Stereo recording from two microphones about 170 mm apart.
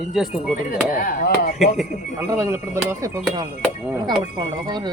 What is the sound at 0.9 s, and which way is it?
Speech, 55° left (ahead or behind).